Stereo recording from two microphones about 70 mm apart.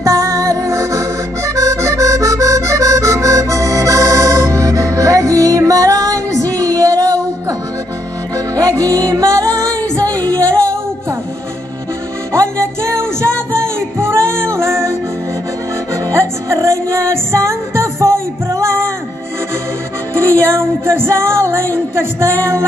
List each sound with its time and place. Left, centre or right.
0.0 s accordion: right
6.6 s music: right
8.5 s music: right
10.2 s music: centre
12.9 s music: right
20.2 s music: right